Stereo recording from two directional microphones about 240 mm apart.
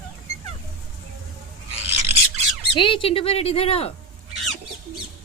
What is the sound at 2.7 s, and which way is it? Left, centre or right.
Speech, left.